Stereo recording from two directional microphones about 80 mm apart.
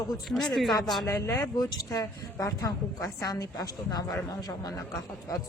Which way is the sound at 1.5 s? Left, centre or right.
Left.